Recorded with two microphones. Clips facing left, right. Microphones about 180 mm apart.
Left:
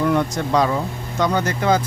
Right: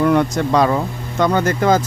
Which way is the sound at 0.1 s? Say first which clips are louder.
Right 4 dB; 60° right (ahead or behind).